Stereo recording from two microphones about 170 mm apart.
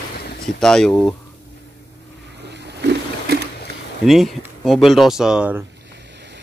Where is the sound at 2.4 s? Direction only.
85° right.